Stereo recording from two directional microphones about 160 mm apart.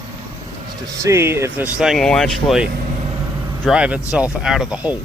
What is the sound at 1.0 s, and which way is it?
Speech, 15° right (ahead or behind).